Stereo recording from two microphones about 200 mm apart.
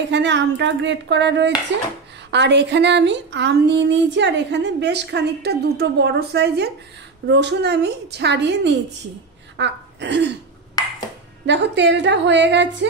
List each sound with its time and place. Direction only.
0.1 s speech: 60° right (ahead or behind)
10.8 s ping: 20° left (ahead or behind)
11.4 s speech: 60° right (ahead or behind)